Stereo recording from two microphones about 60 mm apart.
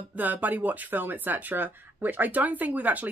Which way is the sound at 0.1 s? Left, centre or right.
Right.